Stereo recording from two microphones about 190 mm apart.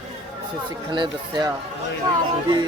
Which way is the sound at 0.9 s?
25° right (ahead or behind).